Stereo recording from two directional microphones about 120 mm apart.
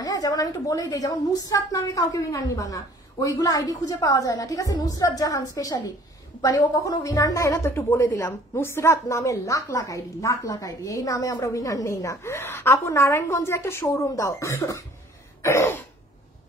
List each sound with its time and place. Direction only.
0.0 s a woman's voice: 30° left (ahead or behind)